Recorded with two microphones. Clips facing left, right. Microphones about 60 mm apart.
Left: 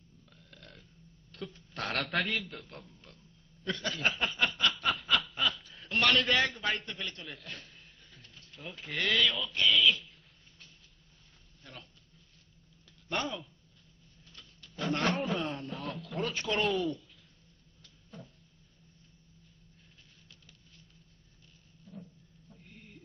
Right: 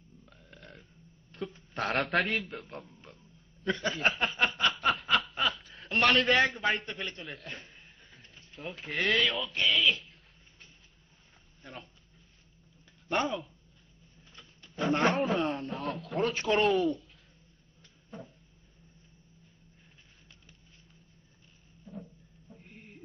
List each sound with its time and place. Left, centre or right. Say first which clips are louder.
0.2 s burping: right 2 dB; right
1.3 s a sound: right 4 dB; right
2.0 s speech: right 3 dB; centre
2.4 s a man's voice: right 4 dB; right
4.0 s speech: right 1 dB; centre
4.7 s snicker: right 3 dB; centre
6.5 s a man's voice: right 4 dB; right
7.4 s music: right 2 dB; right
8.5 s speech: right 3 dB; centre
11.6 s dog: right 4 dB; right
14.3 s a sound: right 3 dB; centre
15.1 s speech: right 4 dB; centre
18.1 s a sound: right 5 dB; right
22.6 s a sound: right 2 dB; right